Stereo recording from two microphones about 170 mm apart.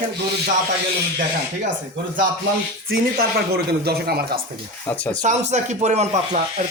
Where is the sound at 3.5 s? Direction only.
65° right (ahead or behind).